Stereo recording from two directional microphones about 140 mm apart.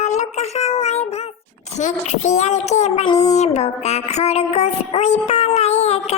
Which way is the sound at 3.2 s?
50° left (ahead or behind).